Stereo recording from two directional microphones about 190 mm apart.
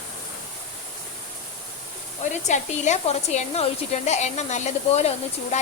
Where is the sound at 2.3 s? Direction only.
40° left (ahead or behind).